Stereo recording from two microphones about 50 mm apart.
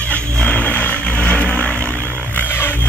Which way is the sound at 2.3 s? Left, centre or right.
Left.